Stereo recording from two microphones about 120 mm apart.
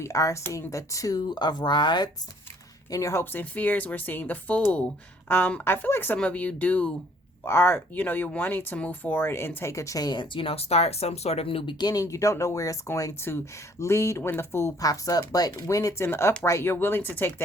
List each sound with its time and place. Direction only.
0.0 s speech: 25° left (ahead or behind)
2.9 s speech: 25° left (ahead or behind)